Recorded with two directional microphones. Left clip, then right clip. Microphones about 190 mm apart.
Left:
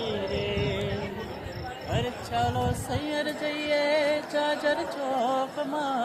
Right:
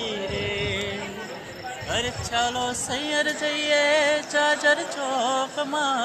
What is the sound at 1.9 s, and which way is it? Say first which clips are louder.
Music: right 4 dB; 5° right (ahead or behind).